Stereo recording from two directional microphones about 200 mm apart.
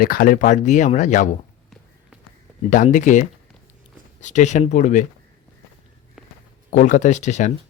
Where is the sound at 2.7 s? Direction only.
40° left (ahead or behind).